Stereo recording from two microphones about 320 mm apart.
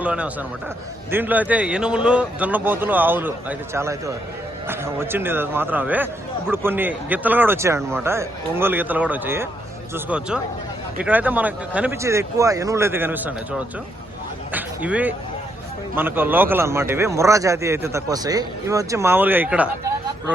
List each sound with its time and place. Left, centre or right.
0.0 s a man's voice: centre
14.5 s speech: centre